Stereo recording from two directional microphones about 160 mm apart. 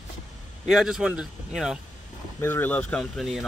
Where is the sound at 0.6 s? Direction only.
Centre (ahead or behind).